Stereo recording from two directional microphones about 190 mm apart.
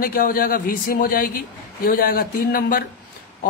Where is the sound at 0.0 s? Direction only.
50° left (ahead or behind).